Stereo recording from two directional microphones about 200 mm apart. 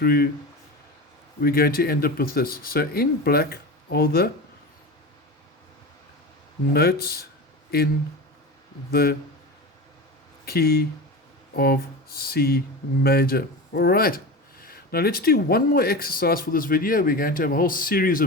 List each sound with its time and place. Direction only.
0.0 s speech: 50° left (ahead or behind)
1.4 s speech: 50° left (ahead or behind)
6.7 s speech: 50° left (ahead or behind)
8.9 s speech: 50° left (ahead or behind)
10.4 s speech: 50° left (ahead or behind)